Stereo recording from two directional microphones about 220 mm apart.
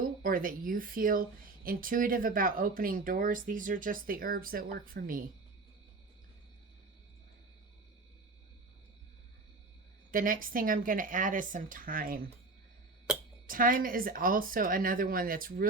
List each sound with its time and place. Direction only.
0.0 s speech: 40° right (ahead or behind)
10.1 s speech: 40° right (ahead or behind)
13.1 s speech: 5° right (ahead or behind)
13.5 s speech: 40° right (ahead or behind)